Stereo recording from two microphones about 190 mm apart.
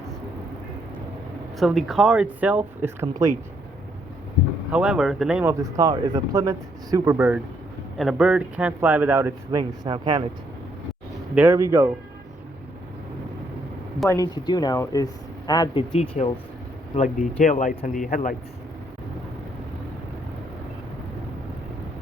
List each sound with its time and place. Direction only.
1.5 s speech: centre (ahead or behind)
4.7 s speech: 5° right (ahead or behind); by 10.2 s 25° right (ahead or behind)
11.3 s speech: 15° right (ahead or behind)
14.1 s speech: 20° left (ahead or behind)
16.0 s speech: 35° left (ahead or behind)